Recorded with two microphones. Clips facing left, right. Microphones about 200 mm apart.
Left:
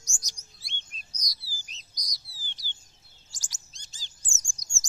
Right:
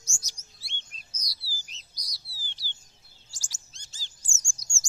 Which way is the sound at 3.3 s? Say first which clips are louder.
Left 1 dB; 15° left (ahead or behind).